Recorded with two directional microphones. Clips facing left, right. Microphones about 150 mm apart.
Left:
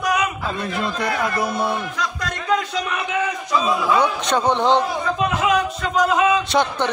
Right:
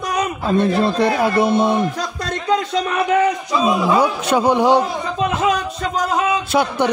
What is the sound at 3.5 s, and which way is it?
Speech, 20° right (ahead or behind).